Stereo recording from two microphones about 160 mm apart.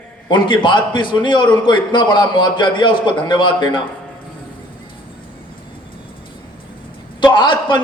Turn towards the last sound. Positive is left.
turn(degrees=30)  # may be behind; listen again after turning